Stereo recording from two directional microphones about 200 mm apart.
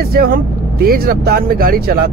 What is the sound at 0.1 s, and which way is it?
Speech, 50° right (ahead or behind).